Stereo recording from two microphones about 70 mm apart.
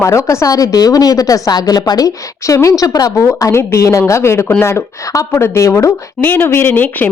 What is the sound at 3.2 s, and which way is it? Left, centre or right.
Speech, left.